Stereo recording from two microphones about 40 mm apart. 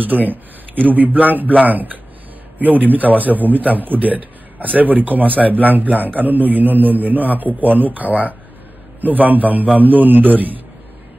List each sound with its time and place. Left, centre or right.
0.0 s a man's voice: right